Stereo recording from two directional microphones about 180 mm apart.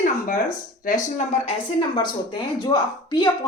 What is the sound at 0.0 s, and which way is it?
Speech, 50° left (ahead or behind).